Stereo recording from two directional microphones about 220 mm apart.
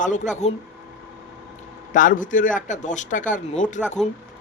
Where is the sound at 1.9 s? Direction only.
35° left (ahead or behind).